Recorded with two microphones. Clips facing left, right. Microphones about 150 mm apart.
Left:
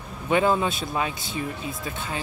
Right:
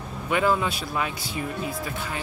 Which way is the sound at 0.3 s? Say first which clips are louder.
Left 2 dB; 25° left (ahead or behind).